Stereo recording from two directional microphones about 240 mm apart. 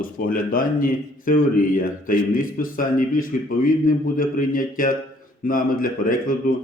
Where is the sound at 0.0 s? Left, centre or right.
Left.